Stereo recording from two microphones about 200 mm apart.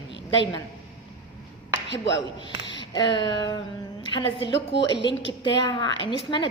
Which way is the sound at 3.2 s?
20° left (ahead or behind).